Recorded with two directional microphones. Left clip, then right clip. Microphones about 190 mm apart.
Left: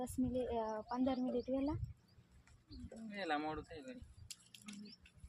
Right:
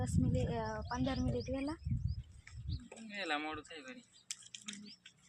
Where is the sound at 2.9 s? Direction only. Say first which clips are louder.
Right 2 dB; 20° left (ahead or behind).